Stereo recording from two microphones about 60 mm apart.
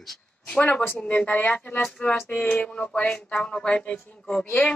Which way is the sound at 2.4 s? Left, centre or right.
Left.